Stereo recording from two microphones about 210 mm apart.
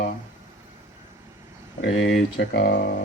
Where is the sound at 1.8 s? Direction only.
60° left (ahead or behind).